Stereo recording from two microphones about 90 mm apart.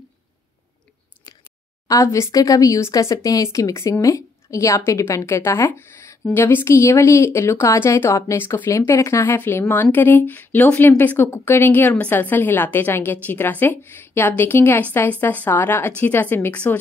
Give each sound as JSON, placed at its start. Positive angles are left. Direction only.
{"t": 1.9, "sound": "a woman's voice", "side_deg": 35}